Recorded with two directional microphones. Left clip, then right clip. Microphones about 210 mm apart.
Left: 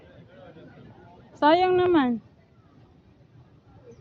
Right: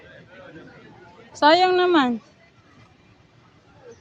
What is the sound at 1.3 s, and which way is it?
Speech, 5° right (ahead or behind).